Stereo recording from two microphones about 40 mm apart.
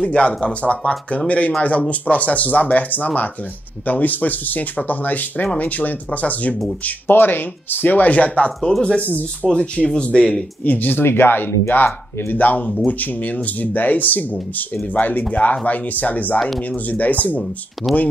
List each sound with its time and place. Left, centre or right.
0.0 s speech: left
7.1 s speech: left
9.5 s speech: left
10.6 s speech: left
11.1 s speech: left
16.3 s speech: centre
16.9 s speech: left